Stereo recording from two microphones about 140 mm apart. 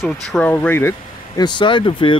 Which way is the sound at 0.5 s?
15° left (ahead or behind).